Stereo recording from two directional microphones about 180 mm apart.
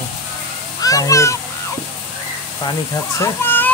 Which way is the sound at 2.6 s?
15° left (ahead or behind).